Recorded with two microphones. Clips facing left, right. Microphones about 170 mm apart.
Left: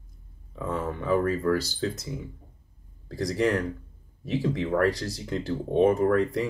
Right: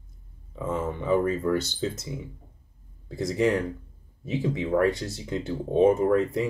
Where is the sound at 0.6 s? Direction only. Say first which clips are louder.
Right 1 dB; centre (ahead or behind).